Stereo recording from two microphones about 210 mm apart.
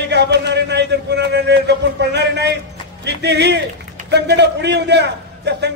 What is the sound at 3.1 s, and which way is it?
A man's voice, 55° right (ahead or behind).